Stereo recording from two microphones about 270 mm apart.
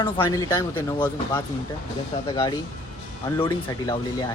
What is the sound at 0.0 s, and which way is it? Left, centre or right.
Speech, centre.